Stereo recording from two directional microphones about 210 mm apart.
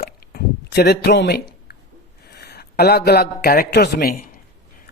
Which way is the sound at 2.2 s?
50° left (ahead or behind).